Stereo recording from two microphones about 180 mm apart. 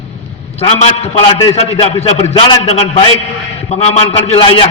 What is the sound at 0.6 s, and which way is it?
A man's voice, 35° left (ahead or behind).